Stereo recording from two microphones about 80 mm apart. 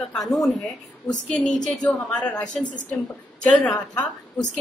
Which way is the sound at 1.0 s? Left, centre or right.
Centre.